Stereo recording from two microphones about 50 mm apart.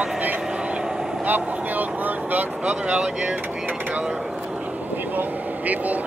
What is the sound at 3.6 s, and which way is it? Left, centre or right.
Mechanisms, right.